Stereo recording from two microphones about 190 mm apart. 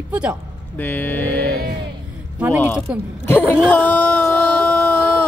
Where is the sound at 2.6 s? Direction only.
10° left (ahead or behind).